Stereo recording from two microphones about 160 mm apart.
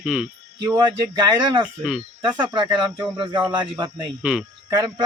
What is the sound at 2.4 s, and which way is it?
Speech, 30° right (ahead or behind).